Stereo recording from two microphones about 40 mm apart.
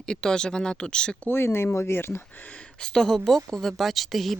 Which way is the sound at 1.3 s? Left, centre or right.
Left.